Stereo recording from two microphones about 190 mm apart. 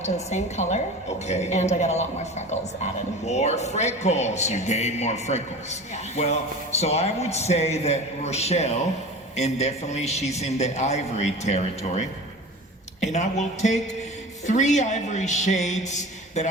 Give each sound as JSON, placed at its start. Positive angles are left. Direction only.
{"t": 0.0, "sound": "speech", "side_deg": 35}
{"t": 6.7, "sound": "speech", "side_deg": 35}